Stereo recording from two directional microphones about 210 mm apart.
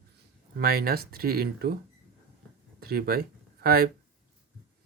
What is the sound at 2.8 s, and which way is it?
Speech, 45° right (ahead or behind).